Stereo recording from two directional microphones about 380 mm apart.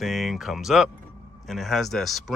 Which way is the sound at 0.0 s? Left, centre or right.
Centre.